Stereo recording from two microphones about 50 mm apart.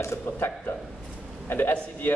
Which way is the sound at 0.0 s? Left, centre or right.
Left.